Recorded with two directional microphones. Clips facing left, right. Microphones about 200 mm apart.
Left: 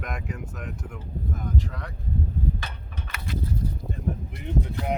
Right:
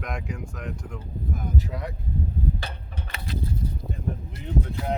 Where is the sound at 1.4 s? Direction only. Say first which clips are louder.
Right 2 dB; 10° right (ahead or behind).